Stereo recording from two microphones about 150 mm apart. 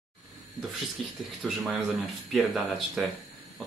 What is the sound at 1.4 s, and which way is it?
Speech, centre (ahead or behind).